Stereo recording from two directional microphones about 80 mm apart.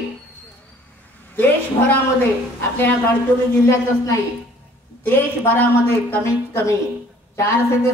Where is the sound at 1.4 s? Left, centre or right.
Left.